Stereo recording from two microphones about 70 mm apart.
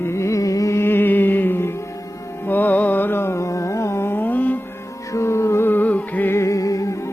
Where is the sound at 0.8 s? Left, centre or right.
Left.